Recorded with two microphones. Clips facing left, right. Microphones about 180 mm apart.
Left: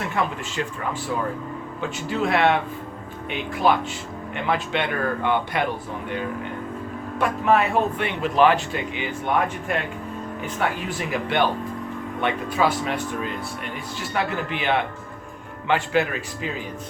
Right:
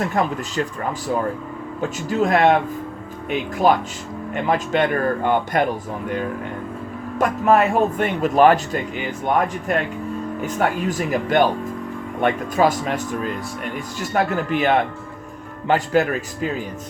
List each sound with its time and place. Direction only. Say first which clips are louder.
0.0 s speech: right 4 dB; 40° right (ahead or behind)
7.2 s speech: right 3 dB; 45° right (ahead or behind)